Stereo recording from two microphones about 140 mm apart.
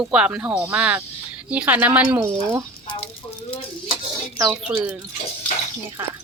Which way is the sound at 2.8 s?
40° left (ahead or behind).